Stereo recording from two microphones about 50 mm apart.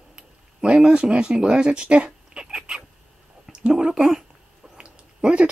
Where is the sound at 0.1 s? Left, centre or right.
Centre.